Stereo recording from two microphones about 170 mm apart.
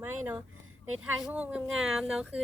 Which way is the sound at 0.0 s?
10° right (ahead or behind).